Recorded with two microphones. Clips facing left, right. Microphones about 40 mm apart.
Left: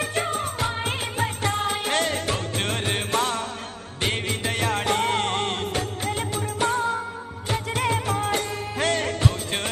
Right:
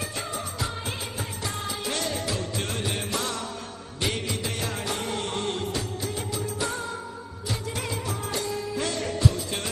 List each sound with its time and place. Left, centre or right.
0.0 s music of bollywood: left
4.0 s music: left